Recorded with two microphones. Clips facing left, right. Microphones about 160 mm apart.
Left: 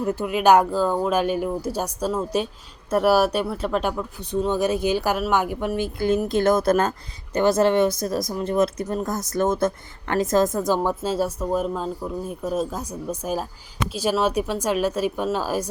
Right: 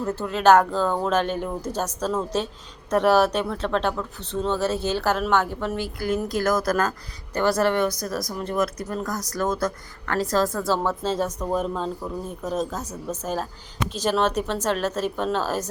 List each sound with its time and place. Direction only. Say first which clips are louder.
0.0 s speech: left 1 dB; 10° left (ahead or behind)